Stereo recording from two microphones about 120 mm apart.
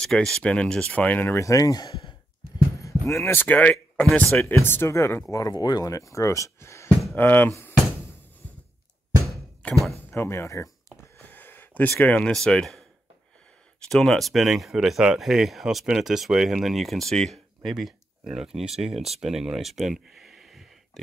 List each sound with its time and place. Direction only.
0.0 s speech: 5° left (ahead or behind)
10.1 s speech: 20° left (ahead or behind)
11.0 s a sound: 15° left (ahead or behind)
12.0 s speech: 10° left (ahead or behind)
13.8 s speech: 5° left (ahead or behind)